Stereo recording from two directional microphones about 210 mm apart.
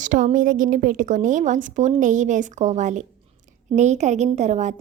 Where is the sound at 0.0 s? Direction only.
35° right (ahead or behind).